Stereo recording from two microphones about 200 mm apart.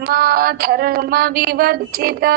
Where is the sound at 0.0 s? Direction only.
50° right (ahead or behind).